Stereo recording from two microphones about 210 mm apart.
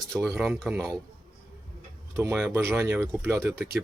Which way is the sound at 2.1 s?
10° right (ahead or behind).